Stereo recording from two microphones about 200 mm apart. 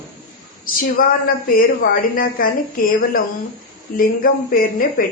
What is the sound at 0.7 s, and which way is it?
A woman's voice, 45° left (ahead or behind).